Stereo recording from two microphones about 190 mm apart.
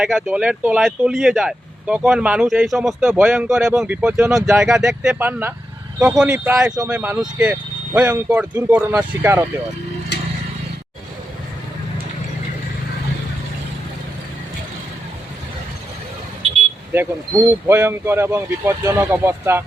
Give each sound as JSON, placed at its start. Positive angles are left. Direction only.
{"t": 0.0, "sound": "speech", "side_deg": -5}
{"t": 16.9, "sound": "speech", "side_deg": -10}